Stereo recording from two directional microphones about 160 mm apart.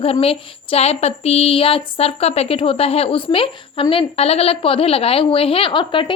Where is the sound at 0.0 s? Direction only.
35° left (ahead or behind).